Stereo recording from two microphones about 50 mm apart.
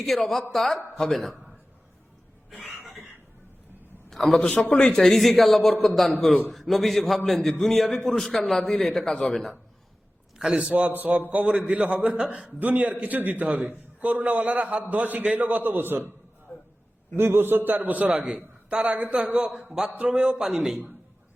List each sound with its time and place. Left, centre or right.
0.0 s a man's voice: centre
2.7 s cough: centre
4.1 s a man's voice: centre
4.4 s a man's voice: left
4.7 s a man's voice: centre
10.3 s a sound: centre
10.6 s a man's voice: right
16.5 s a sound: left
17.2 s a man's voice: right
17.7 s a man's voice: right
18.1 s a man's voice: right